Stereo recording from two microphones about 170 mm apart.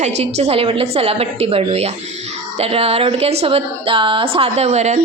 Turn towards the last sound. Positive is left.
turn(degrees=-40)  # may be behind; listen again after turning